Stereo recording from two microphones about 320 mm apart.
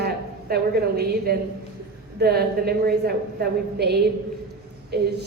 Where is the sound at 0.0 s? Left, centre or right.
Right.